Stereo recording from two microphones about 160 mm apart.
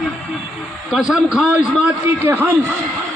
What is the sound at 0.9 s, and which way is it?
A man's voice, 5° right (ahead or behind).